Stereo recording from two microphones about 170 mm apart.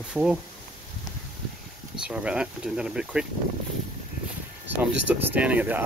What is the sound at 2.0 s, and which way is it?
Speech, 5° right (ahead or behind).